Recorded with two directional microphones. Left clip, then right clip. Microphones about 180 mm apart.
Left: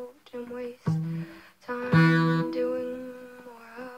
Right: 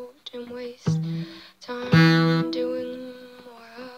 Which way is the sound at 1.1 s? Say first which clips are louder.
Right 4 dB; 5° right (ahead or behind).